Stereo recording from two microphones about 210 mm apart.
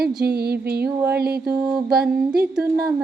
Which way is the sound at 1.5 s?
10° right (ahead or behind).